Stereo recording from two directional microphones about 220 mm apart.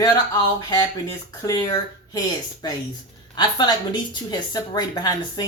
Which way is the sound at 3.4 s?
20° left (ahead or behind).